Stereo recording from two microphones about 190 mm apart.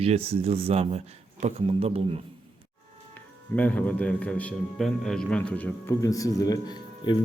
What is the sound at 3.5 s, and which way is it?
A man's voice, 5° left (ahead or behind).